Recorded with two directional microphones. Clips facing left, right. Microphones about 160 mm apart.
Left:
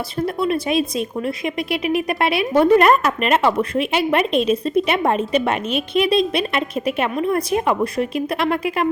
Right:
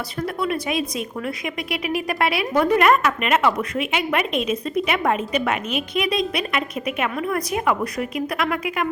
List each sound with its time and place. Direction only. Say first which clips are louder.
0.2 s speech: left 4 dB; 25° left (ahead or behind)